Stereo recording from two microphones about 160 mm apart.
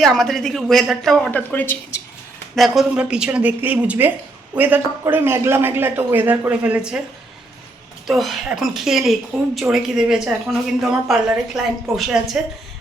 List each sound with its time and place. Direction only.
0.0 s speech: centre (ahead or behind)
2.6 s a man's voice: centre (ahead or behind)
8.0 s speech: centre (ahead or behind)